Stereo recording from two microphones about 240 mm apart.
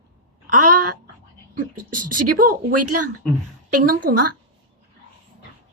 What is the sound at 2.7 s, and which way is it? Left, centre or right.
Speech, right.